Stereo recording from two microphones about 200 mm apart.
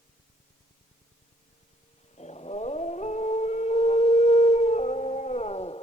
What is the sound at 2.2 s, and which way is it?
Dog, 35° left (ahead or behind).